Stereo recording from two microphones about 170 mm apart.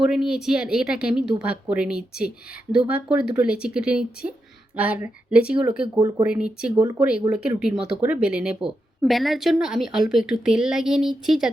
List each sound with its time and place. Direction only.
0.0 s speech: 5° right (ahead or behind)
5.8 s speech: 25° right (ahead or behind)
6.2 s speech: 5° right (ahead or behind)